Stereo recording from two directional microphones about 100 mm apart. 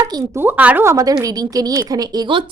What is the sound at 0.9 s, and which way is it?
A woman's voice, 35° right (ahead or behind).